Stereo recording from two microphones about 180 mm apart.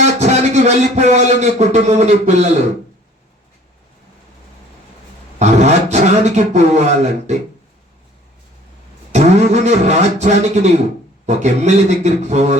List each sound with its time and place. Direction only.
0.0 s a man's voice: 40° right (ahead or behind)
5.4 s speech: 40° right (ahead or behind)
9.1 s speech: 40° right (ahead or behind)